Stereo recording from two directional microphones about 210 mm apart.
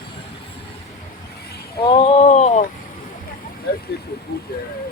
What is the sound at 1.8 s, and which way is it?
Speech, 25° left (ahead or behind).